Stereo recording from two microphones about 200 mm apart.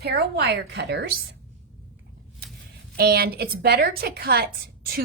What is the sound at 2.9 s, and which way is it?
A woman's voice, 50° right (ahead or behind).